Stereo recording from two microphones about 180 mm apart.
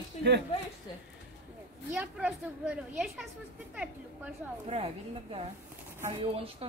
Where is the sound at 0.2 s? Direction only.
40° left (ahead or behind).